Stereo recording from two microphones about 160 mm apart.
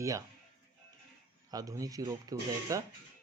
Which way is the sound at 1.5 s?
20° right (ahead or behind).